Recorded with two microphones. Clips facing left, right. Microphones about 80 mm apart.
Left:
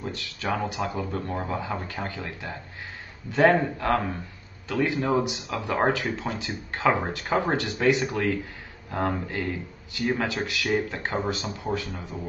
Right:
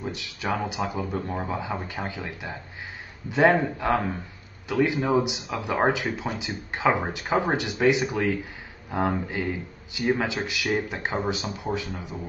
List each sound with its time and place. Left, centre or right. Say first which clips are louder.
0.0 s speech: even; centre